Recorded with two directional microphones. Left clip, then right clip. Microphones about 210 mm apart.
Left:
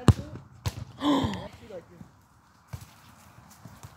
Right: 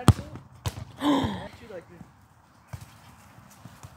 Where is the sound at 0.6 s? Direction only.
5° right (ahead or behind).